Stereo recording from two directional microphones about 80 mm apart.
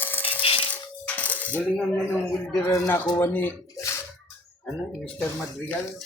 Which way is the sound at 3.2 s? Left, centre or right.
Left.